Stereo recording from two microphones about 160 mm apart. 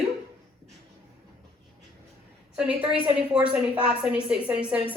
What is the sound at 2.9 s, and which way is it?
A woman's voice, 10° right (ahead or behind).